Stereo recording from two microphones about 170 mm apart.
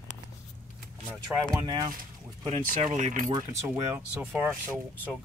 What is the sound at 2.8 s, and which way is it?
Speech, 45° right (ahead or behind).